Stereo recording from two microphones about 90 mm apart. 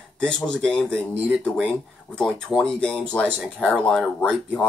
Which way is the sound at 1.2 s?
5° right (ahead or behind).